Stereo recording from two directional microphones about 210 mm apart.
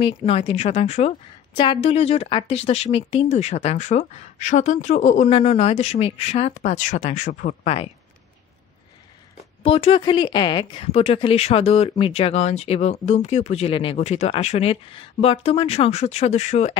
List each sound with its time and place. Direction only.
0.0 s a woman's voice: 25° left (ahead or behind)
9.6 s a woman's voice: 30° left (ahead or behind)